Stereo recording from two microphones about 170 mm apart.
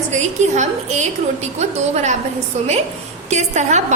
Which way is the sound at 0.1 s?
45° right (ahead or behind).